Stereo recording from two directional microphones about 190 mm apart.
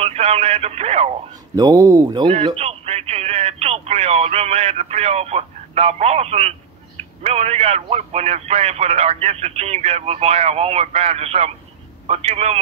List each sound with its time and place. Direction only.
0.0 s speech: 35° right (ahead or behind)
1.5 s a man's voice: 15° right (ahead or behind); by 12.5 s 35° right (ahead or behind)